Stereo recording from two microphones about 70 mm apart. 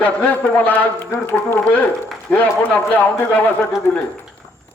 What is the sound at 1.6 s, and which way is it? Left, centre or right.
A man's voice, left.